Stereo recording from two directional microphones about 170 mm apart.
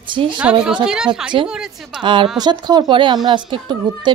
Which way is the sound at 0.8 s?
5° right (ahead or behind).